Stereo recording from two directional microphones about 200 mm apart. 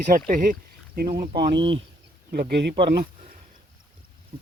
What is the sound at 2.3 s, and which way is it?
Speech, 50° right (ahead or behind).